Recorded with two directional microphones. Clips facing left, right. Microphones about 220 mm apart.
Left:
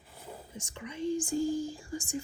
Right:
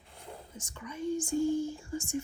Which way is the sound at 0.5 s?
30° left (ahead or behind).